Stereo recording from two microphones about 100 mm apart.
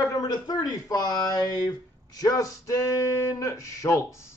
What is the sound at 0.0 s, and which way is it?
Speech, 40° left (ahead or behind).